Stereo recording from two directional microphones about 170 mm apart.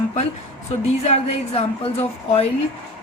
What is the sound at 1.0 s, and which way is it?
Speech, 35° left (ahead or behind).